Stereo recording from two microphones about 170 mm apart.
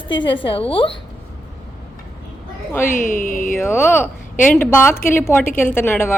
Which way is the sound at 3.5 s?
15° left (ahead or behind).